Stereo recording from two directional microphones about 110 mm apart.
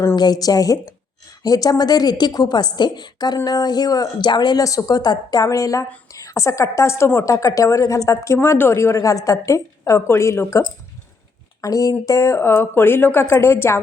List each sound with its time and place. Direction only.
0.2 s a woman's voice: 35° left (ahead or behind)
11.6 s a woman's voice: 30° left (ahead or behind)